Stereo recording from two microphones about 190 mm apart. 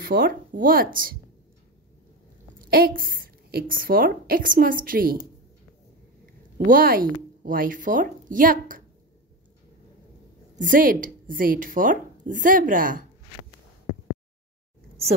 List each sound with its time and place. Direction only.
0.0 s speech: 50° right (ahead or behind)
2.7 s speech: 50° right (ahead or behind)
6.6 s speech: 50° right (ahead or behind)
10.5 s speech: 45° right (ahead or behind)